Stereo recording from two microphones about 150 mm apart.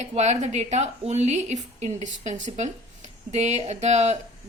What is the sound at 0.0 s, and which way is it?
A woman's voice, 50° right (ahead or behind).